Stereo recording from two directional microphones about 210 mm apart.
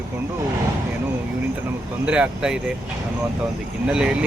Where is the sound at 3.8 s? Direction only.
5° right (ahead or behind).